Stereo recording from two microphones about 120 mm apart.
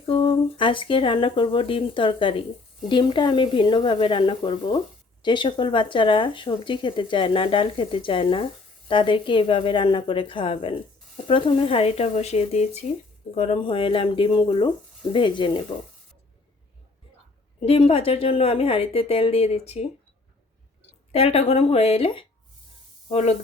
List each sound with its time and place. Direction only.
0.0 s speech: 50° left (ahead or behind); by 13.6 s 65° left (ahead or behind)
13.6 s speech: 45° left (ahead or behind)
17.6 s speech: 50° left (ahead or behind)
21.1 s speech: 55° left (ahead or behind)
23.0 s speech: 60° left (ahead or behind)